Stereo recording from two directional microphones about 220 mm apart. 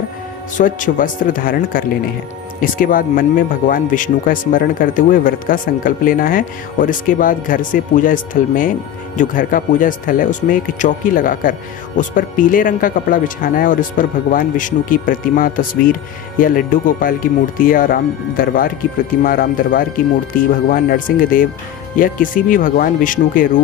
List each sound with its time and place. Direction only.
0.5 s speech: 35° left (ahead or behind)